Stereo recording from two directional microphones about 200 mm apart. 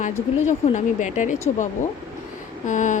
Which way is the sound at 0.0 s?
40° left (ahead or behind).